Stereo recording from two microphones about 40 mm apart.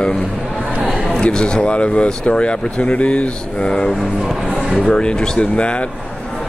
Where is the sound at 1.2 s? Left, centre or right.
Left.